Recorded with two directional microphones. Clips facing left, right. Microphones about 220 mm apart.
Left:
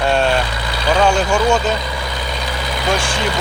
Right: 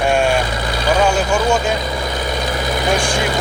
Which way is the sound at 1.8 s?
45° right (ahead or behind).